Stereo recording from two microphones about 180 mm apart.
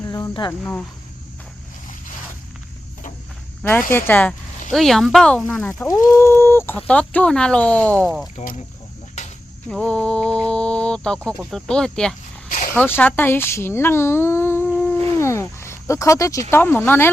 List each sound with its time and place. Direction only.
0.0 s cricket: 20° left (ahead or behind)
0.6 s speech: 5° left (ahead or behind)
3.6 s speech: 10° left (ahead or behind)
8.4 s speech: 45° left (ahead or behind)
9.6 s a woman's voice: 5° left (ahead or behind)